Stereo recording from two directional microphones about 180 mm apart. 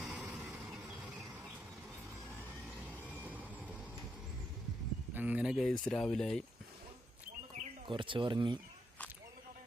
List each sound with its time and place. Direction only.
0.0 s vehicle: centre (ahead or behind)
0.7 s a sound: centre (ahead or behind)
3.1 s vehicle: 10° right (ahead or behind)
5.1 s speech: 10° right (ahead or behind)
7.9 s speech: 25° right (ahead or behind)